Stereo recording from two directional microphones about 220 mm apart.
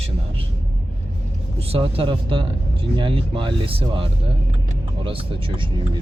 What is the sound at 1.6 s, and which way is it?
Speech, 25° right (ahead or behind).